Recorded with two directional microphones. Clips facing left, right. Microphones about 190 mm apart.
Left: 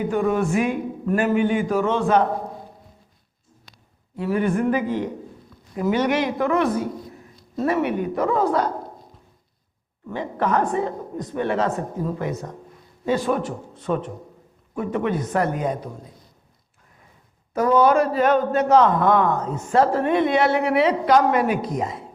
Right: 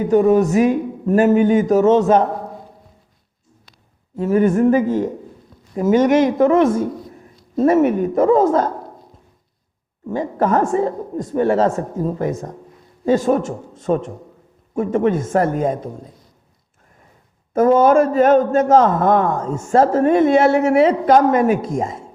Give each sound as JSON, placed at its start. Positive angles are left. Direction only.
{"t": 0.1, "sound": "speech", "side_deg": -40}
{"t": 4.2, "sound": "a man's voice", "side_deg": -45}
{"t": 10.1, "sound": "a man's voice", "side_deg": -45}
{"t": 17.5, "sound": "a man's voice", "side_deg": -50}